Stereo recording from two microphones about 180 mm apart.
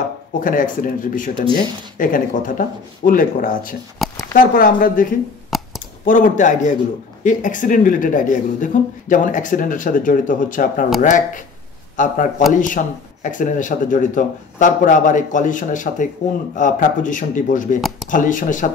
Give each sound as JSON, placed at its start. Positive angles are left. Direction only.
{"t": 0.3, "sound": "speech", "side_deg": 45}
{"t": 5.5, "sound": "clicking", "side_deg": 0}
{"t": 6.0, "sound": "speech", "side_deg": 50}
{"t": 17.7, "sound": "a sound", "side_deg": 0}
{"t": 18.1, "sound": "speech", "side_deg": 45}